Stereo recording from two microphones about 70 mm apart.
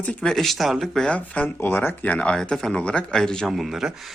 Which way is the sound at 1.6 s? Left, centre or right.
Left.